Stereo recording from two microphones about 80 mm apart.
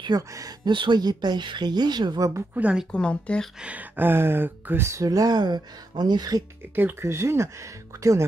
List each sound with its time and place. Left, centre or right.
0.1 s speech: right
0.7 s speech: right
2.5 s speech: centre
2.9 s speech: centre
3.6 s speech: right
6.7 s speech: right
7.1 s speech: right